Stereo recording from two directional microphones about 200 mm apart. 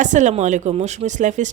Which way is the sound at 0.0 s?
40° right (ahead or behind).